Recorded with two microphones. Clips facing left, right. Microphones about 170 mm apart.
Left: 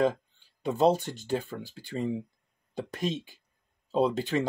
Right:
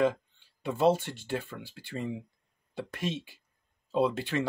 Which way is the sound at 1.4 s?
40° left (ahead or behind).